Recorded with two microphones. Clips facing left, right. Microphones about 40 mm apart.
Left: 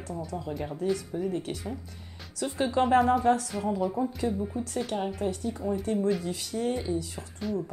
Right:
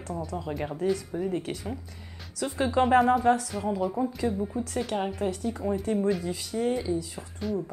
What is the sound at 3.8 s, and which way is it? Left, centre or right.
Speech, centre.